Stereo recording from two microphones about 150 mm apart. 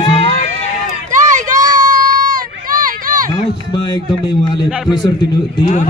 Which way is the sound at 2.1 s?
70° right (ahead or behind).